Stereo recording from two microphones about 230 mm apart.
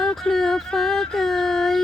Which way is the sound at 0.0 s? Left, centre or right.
Centre.